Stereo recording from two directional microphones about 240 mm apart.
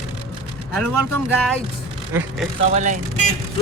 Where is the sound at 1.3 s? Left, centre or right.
Centre.